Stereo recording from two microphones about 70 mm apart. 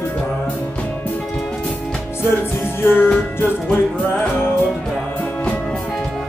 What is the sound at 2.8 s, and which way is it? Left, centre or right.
Music, left.